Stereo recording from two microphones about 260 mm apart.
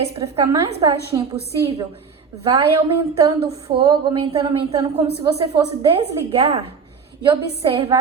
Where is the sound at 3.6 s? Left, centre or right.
Right.